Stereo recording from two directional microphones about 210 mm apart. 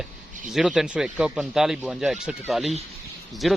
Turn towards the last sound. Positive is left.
turn(degrees=0)  # may be behind; listen again after turning